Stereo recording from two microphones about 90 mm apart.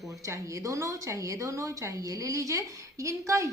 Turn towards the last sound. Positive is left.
turn(degrees=-35)  # may be behind; listen again after turning